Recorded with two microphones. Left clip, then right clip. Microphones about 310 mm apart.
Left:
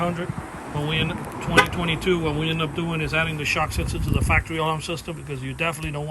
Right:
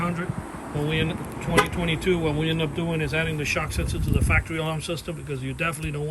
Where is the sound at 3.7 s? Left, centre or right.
Right.